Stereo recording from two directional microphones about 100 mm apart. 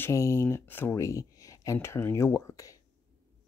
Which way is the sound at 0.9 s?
30° left (ahead or behind).